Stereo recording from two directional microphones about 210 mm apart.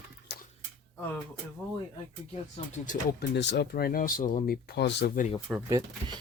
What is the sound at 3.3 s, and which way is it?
Speech, 55° left (ahead or behind).